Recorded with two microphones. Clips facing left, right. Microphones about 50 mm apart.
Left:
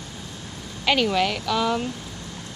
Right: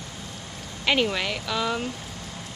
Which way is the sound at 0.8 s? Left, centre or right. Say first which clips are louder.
Left 3 dB; centre.